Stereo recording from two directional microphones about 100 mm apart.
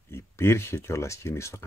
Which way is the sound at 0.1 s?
25° left (ahead or behind).